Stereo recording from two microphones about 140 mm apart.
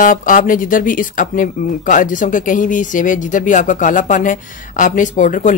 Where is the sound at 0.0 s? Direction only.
75° left (ahead or behind).